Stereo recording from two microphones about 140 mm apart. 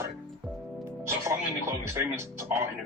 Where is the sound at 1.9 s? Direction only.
20° right (ahead or behind).